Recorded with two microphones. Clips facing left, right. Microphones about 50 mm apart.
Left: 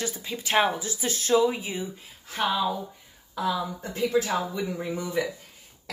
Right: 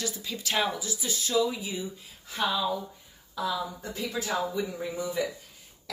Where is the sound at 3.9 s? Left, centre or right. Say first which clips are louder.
Left 11 dB; left.